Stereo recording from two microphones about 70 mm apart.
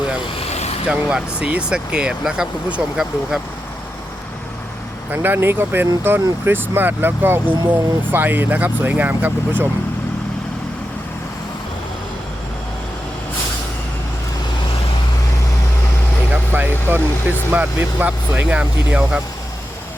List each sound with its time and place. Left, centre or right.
0.9 s speech: centre
5.1 s speech: right
16.5 s vehicle: right
17.5 s speech: right